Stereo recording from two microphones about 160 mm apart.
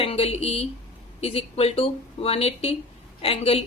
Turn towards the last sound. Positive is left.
turn(degrees=40)  # may be behind; listen again after turning